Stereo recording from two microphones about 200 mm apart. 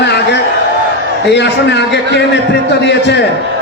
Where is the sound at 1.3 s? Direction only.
60° left (ahead or behind).